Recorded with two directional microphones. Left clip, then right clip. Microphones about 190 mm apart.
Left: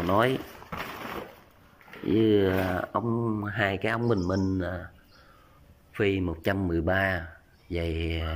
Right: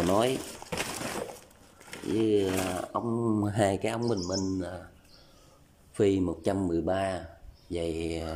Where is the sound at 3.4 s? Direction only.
25° right (ahead or behind).